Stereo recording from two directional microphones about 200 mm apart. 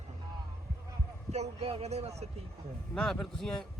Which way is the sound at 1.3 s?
35° right (ahead or behind).